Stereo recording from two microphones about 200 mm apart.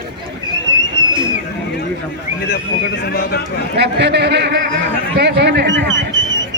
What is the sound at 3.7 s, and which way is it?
A man's voice, 55° right (ahead or behind).